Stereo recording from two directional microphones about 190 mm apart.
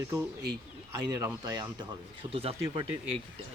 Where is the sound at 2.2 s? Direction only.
30° right (ahead or behind).